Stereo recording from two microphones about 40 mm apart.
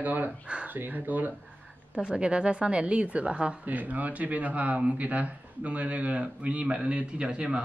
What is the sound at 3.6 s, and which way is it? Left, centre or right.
Speech, right.